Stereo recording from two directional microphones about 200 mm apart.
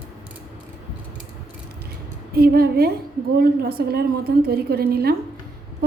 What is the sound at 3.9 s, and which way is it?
A woman's voice, 50° right (ahead or behind).